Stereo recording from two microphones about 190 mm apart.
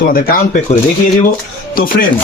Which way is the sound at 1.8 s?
50° left (ahead or behind).